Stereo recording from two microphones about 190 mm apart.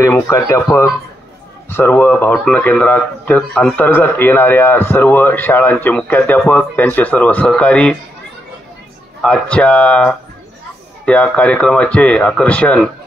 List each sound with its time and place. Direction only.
0.0 s speech: 15° left (ahead or behind)
9.2 s speech: 5° left (ahead or behind)